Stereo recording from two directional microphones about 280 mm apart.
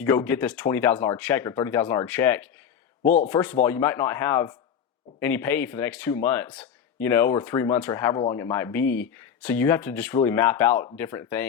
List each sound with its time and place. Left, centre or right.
0.0 s speech: centre
3.0 s speech: left
3.2 s speech: centre